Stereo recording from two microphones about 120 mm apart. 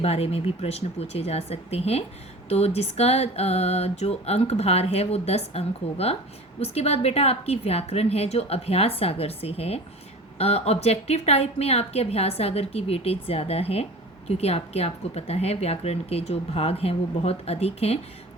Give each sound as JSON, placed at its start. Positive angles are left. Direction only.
{"t": 0.0, "sound": "a woman's voice", "side_deg": 55}